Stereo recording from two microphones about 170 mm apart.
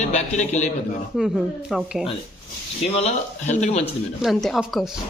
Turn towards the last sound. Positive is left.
turn(degrees=0)  # may be behind; listen again after turning